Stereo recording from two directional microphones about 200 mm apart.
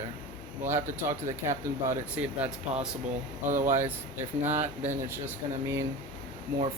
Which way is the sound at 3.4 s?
40° right (ahead or behind).